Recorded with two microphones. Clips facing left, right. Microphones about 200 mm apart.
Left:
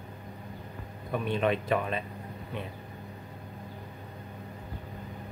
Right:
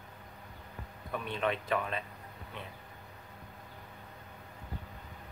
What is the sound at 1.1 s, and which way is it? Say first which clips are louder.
Speech: left 6 dB; 15° left (ahead or behind).